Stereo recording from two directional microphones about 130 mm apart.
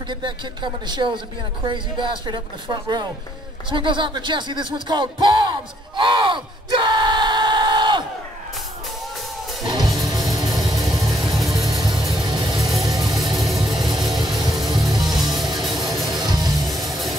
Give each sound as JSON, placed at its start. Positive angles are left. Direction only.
{"t": 0.1, "sound": "speech", "side_deg": -35}
{"t": 9.7, "sound": "music", "side_deg": -30}
{"t": 10.5, "sound": "music", "side_deg": 0}
{"t": 11.3, "sound": "vehicle", "side_deg": 0}
{"t": 12.5, "sound": "a sound", "side_deg": 0}
{"t": 13.1, "sound": "vehicle", "side_deg": 0}
{"t": 13.6, "sound": "music", "side_deg": 0}
{"t": 16.2, "sound": "music", "side_deg": -35}
{"t": 16.6, "sound": "music", "side_deg": 0}